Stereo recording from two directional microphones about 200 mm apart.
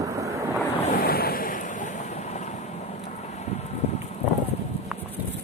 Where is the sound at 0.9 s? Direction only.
50° left (ahead or behind).